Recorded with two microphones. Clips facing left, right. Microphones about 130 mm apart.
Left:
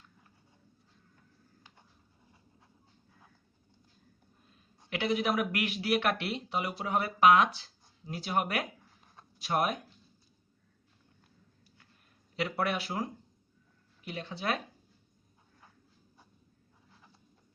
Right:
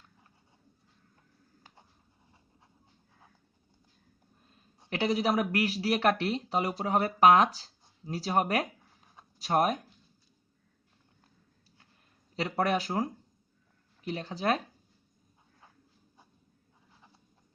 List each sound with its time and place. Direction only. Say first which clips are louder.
4.9 s speech: right 2 dB; 35° right (ahead or behind)
12.4 s speech: right 3 dB; 40° right (ahead or behind)